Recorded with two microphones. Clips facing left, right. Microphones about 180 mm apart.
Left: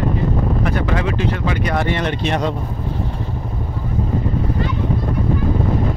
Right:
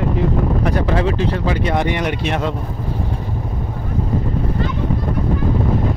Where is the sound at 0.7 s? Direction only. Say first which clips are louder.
Right 2 dB; 30° right (ahead or behind).